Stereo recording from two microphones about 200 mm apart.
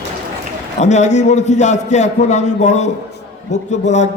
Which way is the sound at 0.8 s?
35° left (ahead or behind).